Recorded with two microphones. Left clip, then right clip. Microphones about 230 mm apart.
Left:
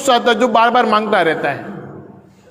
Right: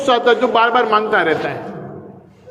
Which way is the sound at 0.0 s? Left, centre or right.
Left.